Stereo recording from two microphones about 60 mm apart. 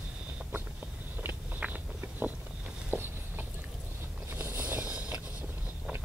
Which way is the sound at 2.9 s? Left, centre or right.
Right.